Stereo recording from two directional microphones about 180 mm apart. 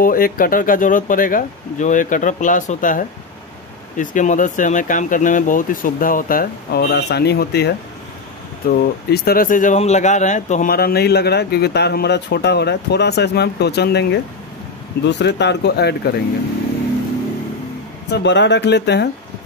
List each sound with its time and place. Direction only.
0.0 s speech: 50° left (ahead or behind)
18.1 s speech: 80° left